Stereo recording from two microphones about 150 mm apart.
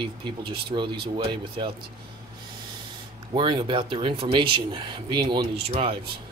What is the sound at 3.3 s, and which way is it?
Speech, 35° right (ahead or behind).